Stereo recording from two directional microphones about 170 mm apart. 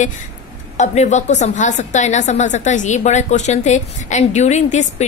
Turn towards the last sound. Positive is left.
turn(degrees=40)  # may be behind; listen again after turning